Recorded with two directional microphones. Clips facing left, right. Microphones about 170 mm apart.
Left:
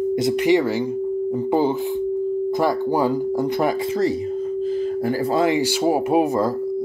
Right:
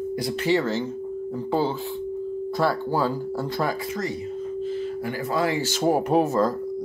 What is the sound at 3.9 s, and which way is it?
Speech, 35° left (ahead or behind).